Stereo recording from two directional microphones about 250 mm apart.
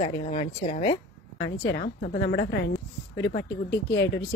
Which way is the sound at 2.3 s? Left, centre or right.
Left.